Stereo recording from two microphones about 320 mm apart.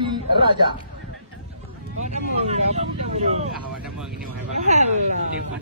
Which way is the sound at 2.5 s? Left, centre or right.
Right.